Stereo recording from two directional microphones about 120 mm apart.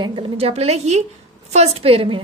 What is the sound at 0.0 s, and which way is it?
A woman's voice, 45° right (ahead or behind).